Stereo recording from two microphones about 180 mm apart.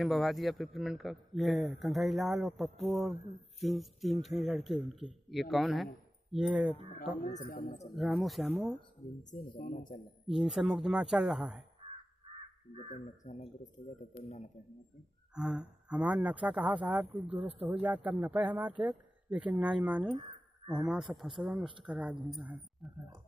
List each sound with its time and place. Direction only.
0.0 s a man's voice: centre (ahead or behind)
7.2 s speech: 50° left (ahead or behind)
7.9 s a man's voice: centre (ahead or behind)
9.3 s speech: 50° left (ahead or behind)
10.2 s a man's voice: centre (ahead or behind)
12.7 s speech: 40° left (ahead or behind)
15.3 s speech: 5° right (ahead or behind)
20.2 s a sound: 25° right (ahead or behind)
21.1 s a man's voice: centre (ahead or behind)